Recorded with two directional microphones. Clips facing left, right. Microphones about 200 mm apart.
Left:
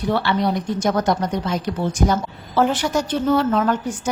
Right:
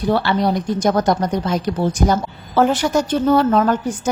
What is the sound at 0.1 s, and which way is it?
A woman's voice, 40° right (ahead or behind).